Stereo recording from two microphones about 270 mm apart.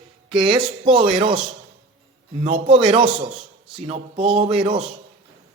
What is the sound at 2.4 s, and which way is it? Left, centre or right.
Speech, right.